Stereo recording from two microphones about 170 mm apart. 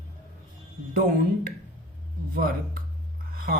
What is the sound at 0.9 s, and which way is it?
A woman's voice, 55° right (ahead or behind).